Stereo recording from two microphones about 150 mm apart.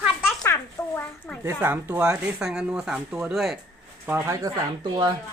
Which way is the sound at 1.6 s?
15° right (ahead or behind).